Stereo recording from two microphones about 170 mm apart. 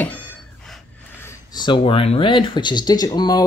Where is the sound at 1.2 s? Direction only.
25° left (ahead or behind).